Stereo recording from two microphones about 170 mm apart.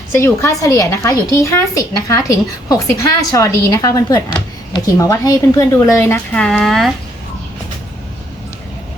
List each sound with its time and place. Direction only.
0.2 s a woman's voice: 15° left (ahead or behind)